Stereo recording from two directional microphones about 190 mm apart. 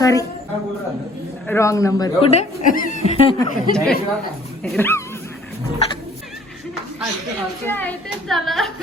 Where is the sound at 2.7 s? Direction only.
45° left (ahead or behind).